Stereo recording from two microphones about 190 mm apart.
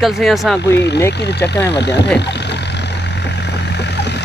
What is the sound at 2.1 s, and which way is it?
Vehicle, 65° left (ahead or behind).